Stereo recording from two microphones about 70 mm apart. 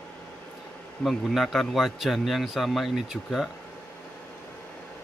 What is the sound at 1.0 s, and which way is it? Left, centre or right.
Speech, centre.